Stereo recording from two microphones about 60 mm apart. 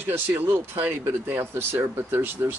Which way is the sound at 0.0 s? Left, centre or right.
Right.